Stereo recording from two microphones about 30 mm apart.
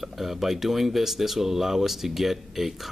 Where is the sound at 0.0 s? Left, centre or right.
Centre.